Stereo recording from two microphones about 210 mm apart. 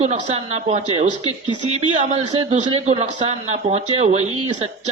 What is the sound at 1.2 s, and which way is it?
Speech, 20° left (ahead or behind).